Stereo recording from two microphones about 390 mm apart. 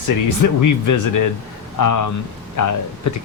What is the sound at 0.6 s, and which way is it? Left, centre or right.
Speech, left.